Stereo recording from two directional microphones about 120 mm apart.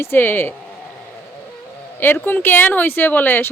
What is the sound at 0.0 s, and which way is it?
Speech, 20° left (ahead or behind).